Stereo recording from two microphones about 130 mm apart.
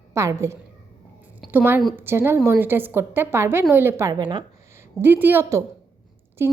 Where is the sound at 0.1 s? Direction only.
25° right (ahead or behind).